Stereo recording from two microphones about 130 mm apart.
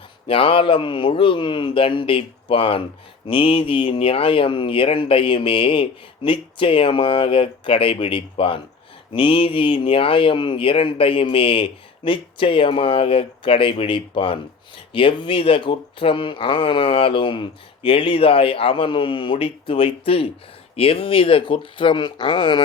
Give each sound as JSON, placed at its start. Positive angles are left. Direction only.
{"t": 0.3, "sound": "speech", "side_deg": 40}